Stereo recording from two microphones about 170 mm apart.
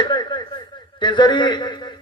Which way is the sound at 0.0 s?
25° left (ahead or behind).